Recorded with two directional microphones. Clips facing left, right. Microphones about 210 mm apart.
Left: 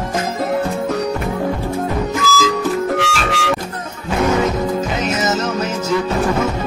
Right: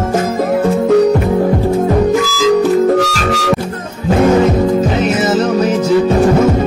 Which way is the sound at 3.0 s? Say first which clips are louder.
Right 5 dB; 40° right (ahead or behind).